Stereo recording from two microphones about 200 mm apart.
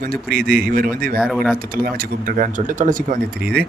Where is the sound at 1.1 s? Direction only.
Centre (ahead or behind).